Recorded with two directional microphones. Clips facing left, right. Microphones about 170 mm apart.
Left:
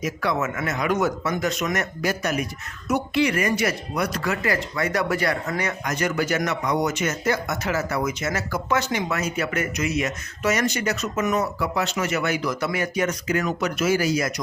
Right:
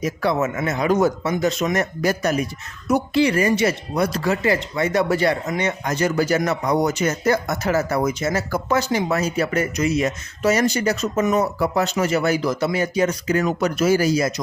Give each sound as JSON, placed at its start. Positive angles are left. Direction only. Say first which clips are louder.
{"t": 0.0, "sound": "speech", "louder": "right 4 dB", "side_deg": -30}